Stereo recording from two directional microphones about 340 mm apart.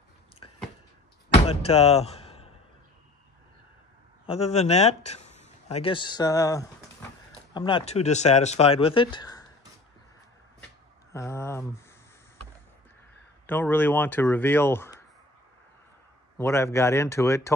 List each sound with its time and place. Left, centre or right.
0.4 s a sound: centre
1.3 s music: centre
4.3 s speech: centre
11.1 s speech: centre
13.5 s speech: centre
16.3 s speech: centre